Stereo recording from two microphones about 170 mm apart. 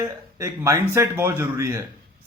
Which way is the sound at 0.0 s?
15° right (ahead or behind).